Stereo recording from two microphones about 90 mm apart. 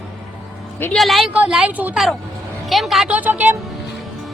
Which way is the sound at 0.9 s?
Centre (ahead or behind).